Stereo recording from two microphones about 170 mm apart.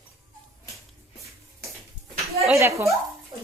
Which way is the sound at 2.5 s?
15° right (ahead or behind).